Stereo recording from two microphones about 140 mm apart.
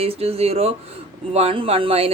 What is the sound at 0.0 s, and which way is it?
Speech, 45° right (ahead or behind).